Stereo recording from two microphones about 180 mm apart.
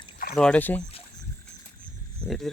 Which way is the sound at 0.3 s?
5° left (ahead or behind).